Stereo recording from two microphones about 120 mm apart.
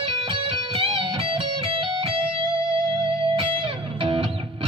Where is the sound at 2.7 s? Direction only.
50° right (ahead or behind).